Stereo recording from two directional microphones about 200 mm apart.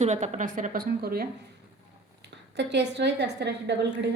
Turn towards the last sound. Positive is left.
turn(degrees=-55)  # may be behind; listen again after turning